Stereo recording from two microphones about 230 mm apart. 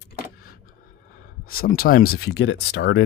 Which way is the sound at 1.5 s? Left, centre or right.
Left.